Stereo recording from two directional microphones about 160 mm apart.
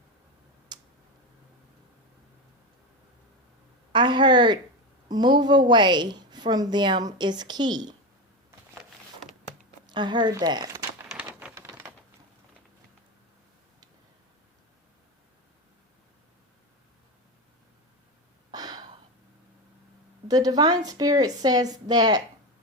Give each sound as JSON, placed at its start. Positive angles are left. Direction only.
{"t": 0.7, "sound": "tick-tock", "side_deg": -25}
{"t": 3.9, "sound": "a woman's voice", "side_deg": -30}
{"t": 9.8, "sound": "speech", "side_deg": -30}
{"t": 18.5, "sound": "a sound", "side_deg": -25}
{"t": 20.2, "sound": "a woman's voice", "side_deg": -25}